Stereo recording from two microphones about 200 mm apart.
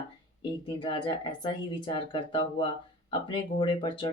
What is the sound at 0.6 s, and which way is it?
Speech, 25° left (ahead or behind).